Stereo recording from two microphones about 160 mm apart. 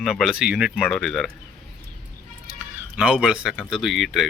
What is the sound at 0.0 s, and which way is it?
Speech, centre (ahead or behind).